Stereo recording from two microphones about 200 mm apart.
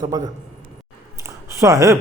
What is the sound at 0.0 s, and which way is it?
Speech, 20° right (ahead or behind).